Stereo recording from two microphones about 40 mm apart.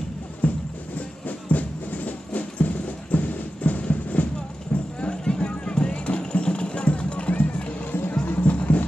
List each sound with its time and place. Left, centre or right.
0.4 s music: left
5.0 s music: left